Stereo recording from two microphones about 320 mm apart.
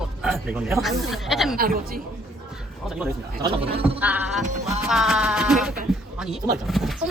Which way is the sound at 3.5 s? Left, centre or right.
Centre.